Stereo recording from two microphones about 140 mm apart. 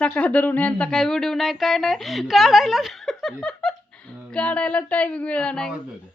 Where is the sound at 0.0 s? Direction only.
10° left (ahead or behind).